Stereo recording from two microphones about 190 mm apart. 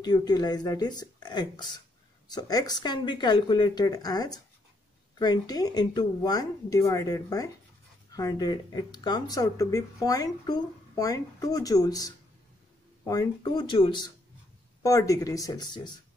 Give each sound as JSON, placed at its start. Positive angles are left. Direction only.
{"t": 0.0, "sound": "speech", "side_deg": 20}